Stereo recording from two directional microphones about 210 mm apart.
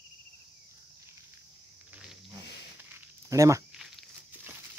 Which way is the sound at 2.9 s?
15° right (ahead or behind).